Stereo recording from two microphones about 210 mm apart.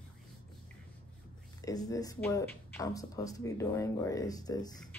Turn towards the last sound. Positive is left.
turn(degrees=20)  # may be behind; listen again after turning